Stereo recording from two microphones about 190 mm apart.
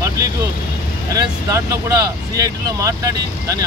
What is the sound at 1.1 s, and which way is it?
Speech, 15° right (ahead or behind).